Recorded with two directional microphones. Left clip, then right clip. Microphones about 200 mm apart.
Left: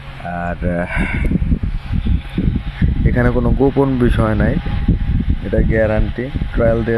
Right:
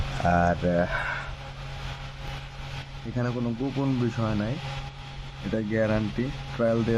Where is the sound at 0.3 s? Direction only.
Centre (ahead or behind).